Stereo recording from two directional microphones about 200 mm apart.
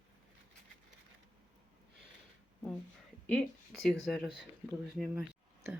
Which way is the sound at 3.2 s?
5° left (ahead or behind).